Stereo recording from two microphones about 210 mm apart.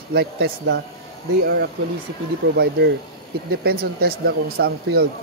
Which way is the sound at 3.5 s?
50° right (ahead or behind).